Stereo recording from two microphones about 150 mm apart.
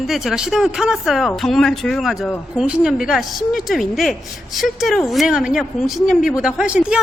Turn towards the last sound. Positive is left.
turn(degrees=-5)  # may be behind; listen again after turning